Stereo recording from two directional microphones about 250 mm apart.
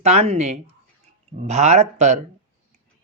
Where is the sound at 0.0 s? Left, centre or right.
Right.